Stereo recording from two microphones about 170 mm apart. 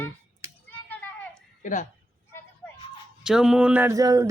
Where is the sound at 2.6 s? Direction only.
5° left (ahead or behind).